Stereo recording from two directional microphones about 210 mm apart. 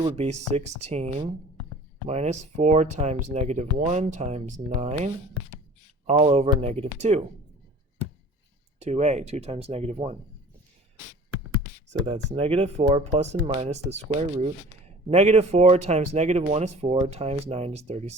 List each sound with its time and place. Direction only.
0.0 s speech: 30° right (ahead or behind)
8.8 s speech: 30° right (ahead or behind)
12.0 s speech: 30° right (ahead or behind)